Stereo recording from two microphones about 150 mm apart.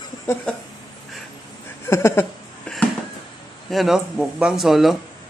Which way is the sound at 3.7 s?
Centre (ahead or behind).